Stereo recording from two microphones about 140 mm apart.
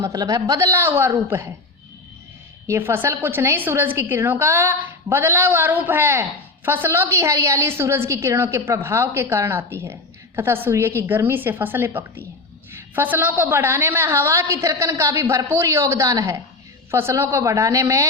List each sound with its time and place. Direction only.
0.0 s a woman's voice: 25° right (ahead or behind)
2.6 s a woman's voice: 15° right (ahead or behind)